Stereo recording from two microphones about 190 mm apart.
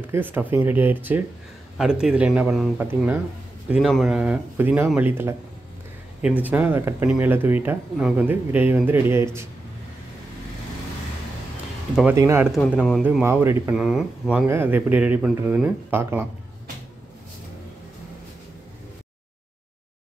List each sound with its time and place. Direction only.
0.1 s speech: 10° right (ahead or behind)
6.4 s speech: 10° right (ahead or behind)
11.9 s speech: 5° right (ahead or behind)
12.2 s speech: 15° right (ahead or behind)
13.7 s speech: 5° right (ahead or behind)